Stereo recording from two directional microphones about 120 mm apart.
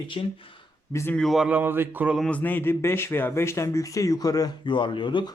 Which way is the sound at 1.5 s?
15° right (ahead or behind).